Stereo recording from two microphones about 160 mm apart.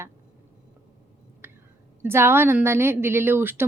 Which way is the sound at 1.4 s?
15° right (ahead or behind).